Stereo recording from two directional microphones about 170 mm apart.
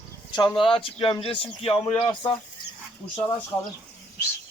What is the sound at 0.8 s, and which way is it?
Speech, 30° left (ahead or behind).